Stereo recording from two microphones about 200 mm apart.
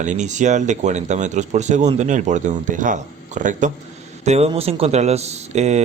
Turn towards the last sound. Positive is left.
turn(degrees=-35)  # may be behind; listen again after turning